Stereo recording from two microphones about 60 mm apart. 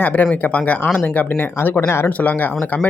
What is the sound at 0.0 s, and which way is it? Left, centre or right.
Speech, left.